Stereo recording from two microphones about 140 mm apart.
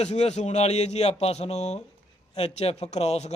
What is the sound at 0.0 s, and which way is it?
A man's voice, 50° left (ahead or behind).